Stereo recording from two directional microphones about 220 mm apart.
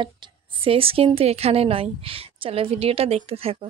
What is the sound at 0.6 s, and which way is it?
Speech, 25° right (ahead or behind).